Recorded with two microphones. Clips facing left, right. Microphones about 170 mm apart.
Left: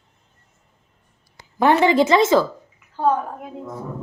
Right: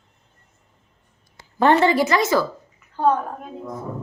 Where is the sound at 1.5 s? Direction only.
15° left (ahead or behind).